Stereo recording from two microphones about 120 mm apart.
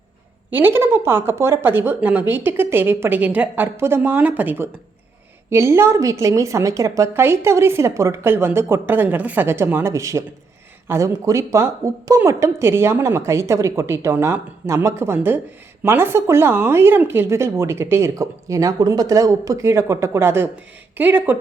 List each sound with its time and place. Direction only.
0.5 s a woman's voice: 20° right (ahead or behind)